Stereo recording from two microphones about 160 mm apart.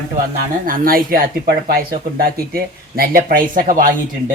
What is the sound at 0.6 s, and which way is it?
Speech, 60° right (ahead or behind).